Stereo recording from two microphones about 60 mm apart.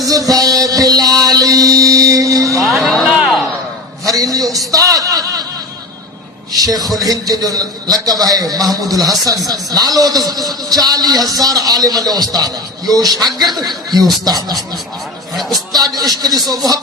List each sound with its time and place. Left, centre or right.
0.0 s music: right
2.6 s music: centre
4.1 s a sound: right
6.5 s a sound: right
7.0 s a man's voice: right
15.7 s speech: right